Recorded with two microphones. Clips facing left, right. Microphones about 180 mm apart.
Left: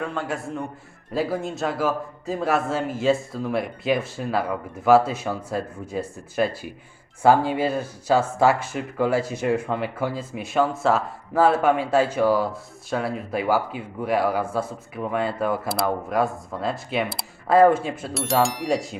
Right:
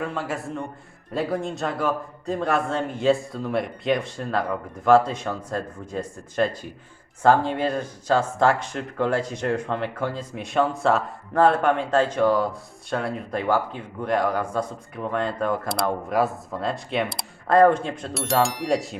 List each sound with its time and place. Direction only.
0.0 s speech: centre (ahead or behind)